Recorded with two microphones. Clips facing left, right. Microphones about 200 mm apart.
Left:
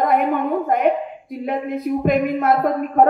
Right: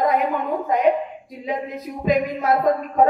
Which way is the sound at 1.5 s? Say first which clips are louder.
Left 5 dB; 55° left (ahead or behind).